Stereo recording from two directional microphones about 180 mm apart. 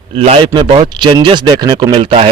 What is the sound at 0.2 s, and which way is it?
Speech, 30° right (ahead or behind).